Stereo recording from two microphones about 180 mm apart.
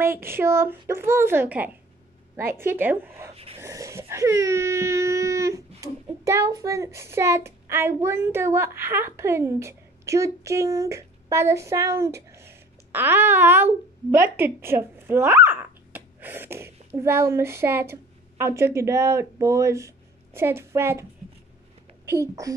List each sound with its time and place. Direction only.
0.0 s speech: 15° right (ahead or behind)
3.3 s a sound: 35° right (ahead or behind)
3.6 s a woman's voice: 15° right (ahead or behind)